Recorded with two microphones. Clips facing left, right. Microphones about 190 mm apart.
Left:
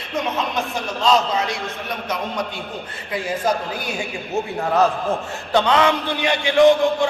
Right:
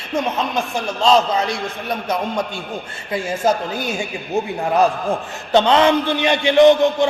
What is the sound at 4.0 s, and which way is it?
Speech, 15° right (ahead or behind).